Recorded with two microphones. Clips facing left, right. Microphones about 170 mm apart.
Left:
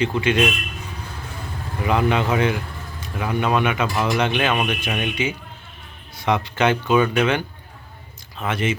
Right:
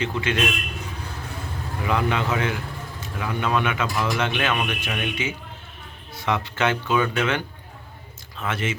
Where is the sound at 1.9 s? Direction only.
20° left (ahead or behind).